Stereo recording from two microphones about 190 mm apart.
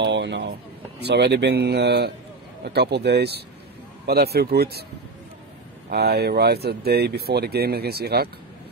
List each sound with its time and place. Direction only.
0.0 s speech: 70° right (ahead or behind)
5.9 s speech: 60° right (ahead or behind)